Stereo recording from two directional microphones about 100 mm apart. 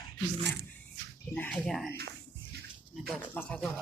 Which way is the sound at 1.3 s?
15° left (ahead or behind).